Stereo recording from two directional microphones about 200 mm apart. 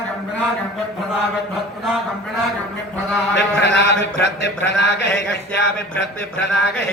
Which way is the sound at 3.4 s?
60° left (ahead or behind).